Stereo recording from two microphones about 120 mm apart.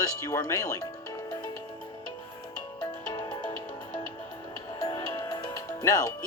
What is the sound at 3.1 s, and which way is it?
Music, 35° left (ahead or behind).